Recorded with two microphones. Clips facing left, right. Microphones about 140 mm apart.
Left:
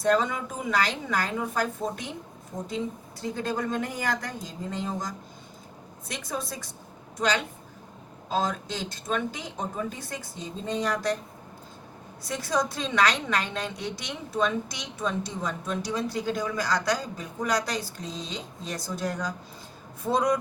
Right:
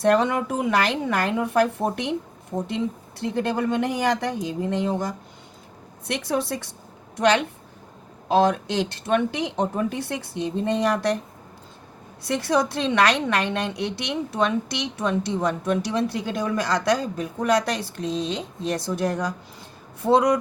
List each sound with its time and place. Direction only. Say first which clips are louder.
0.0 s a woman's voice: right 5 dB; 65° right (ahead or behind)
12.2 s a woman's voice: right 6 dB; 70° right (ahead or behind)